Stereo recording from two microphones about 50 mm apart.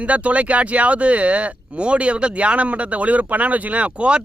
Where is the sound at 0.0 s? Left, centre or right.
Right.